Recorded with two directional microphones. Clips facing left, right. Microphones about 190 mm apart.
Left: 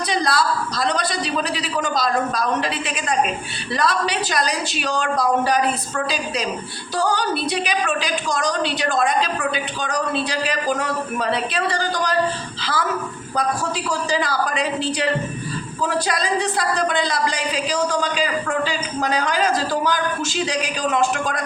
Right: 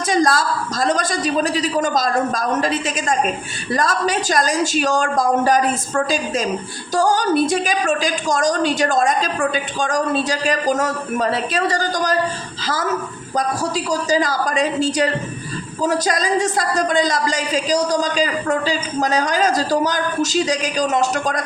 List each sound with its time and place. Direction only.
0.1 s a man's voice: 45° right (ahead or behind)